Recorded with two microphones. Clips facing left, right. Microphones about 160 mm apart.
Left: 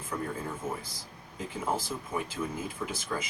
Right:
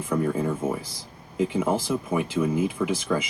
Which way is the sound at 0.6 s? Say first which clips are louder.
Right 8 dB; 80° right.